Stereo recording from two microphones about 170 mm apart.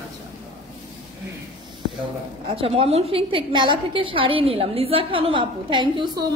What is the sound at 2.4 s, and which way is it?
A woman's voice, 35° right (ahead or behind).